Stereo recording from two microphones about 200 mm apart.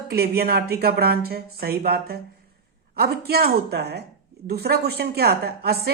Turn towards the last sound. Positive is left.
turn(degrees=-50)  # may be behind; listen again after turning